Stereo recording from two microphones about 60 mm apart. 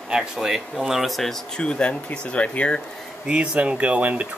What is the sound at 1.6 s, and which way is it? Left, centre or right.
Speech, centre.